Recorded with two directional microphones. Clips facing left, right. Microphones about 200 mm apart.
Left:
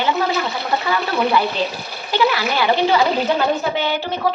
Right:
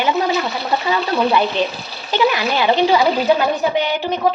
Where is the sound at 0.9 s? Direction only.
20° right (ahead or behind).